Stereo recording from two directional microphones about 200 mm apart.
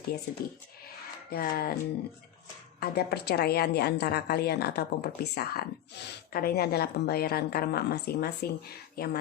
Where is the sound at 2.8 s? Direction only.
55° left (ahead or behind).